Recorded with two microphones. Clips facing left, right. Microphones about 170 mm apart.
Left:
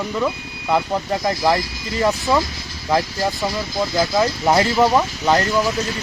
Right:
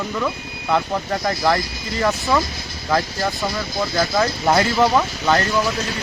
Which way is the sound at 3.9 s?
10° left (ahead or behind).